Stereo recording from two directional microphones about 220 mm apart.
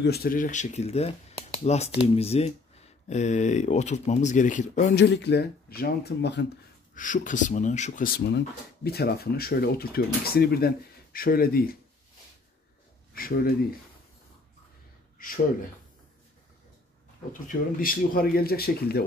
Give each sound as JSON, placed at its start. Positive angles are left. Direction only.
{"t": 0.0, "sound": "speech", "side_deg": 45}
{"t": 7.0, "sound": "speech", "side_deg": 35}
{"t": 13.1, "sound": "speech", "side_deg": 40}
{"t": 17.3, "sound": "speech", "side_deg": 40}